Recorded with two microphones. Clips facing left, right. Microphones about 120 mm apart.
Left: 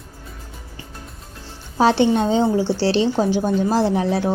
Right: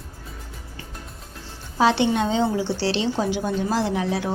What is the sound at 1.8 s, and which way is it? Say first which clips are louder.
A woman's voice: left 3 dB; 40° left (ahead or behind).